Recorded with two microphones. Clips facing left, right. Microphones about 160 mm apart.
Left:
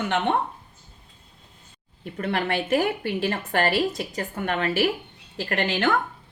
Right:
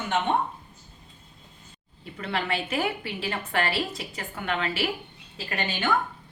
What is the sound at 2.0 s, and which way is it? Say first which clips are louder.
A woman's voice: left 4 dB; 50° left (ahead or behind).